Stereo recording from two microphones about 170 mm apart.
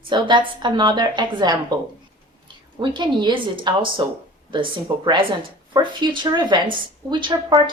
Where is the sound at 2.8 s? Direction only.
25° right (ahead or behind).